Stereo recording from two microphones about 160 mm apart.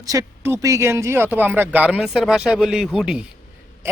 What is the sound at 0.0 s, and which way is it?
Speech, 20° right (ahead or behind).